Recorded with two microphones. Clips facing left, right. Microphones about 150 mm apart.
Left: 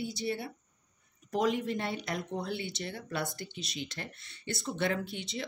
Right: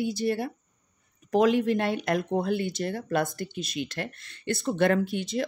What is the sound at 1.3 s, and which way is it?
Speech, 70° right (ahead or behind).